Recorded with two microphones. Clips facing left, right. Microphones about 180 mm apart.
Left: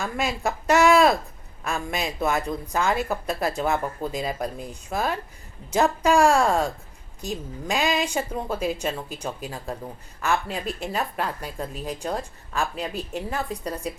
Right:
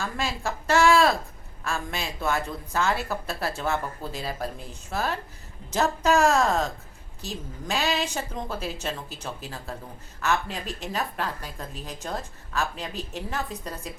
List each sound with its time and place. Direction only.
0.3 s a woman's voice: 15° left (ahead or behind)